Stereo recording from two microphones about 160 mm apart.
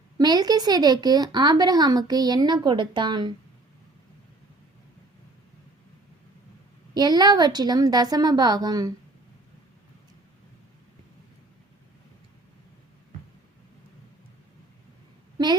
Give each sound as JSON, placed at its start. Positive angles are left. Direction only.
{"t": 0.2, "sound": "a woman's voice", "side_deg": -25}
{"t": 6.9, "sound": "a woman's voice", "side_deg": -25}